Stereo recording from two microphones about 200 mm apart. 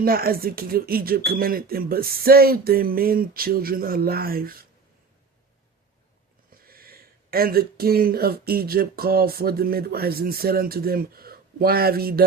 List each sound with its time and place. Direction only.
0.0 s speech: 45° right (ahead or behind)
6.6 s speech: 45° right (ahead or behind)